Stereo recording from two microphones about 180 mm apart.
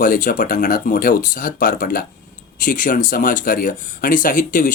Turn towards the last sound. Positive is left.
turn(degrees=50)  # may be behind; listen again after turning